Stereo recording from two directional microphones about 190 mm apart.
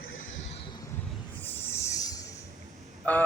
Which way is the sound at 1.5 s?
10° left (ahead or behind).